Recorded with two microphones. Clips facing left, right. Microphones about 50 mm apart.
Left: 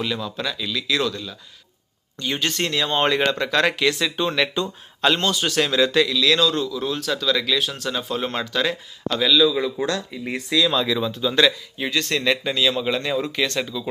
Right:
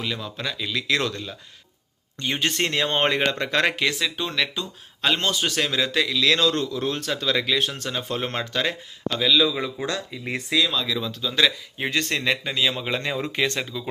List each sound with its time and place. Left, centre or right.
0.0 s speech: centre; by 1.1 s right
2.1 s speech: right; by 4.0 s centre
4.3 s speech: centre
5.0 s speech: centre
6.1 s speech: right
6.6 s speech: right
7.0 s speech: right
8.1 s speech: right
8.4 s speech: centre
10.7 s speech: left
11.0 s a man's voice: centre
11.8 s speech: right
12.3 s speech: centre